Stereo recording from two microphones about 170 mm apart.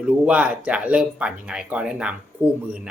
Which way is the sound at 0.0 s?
5° right (ahead or behind).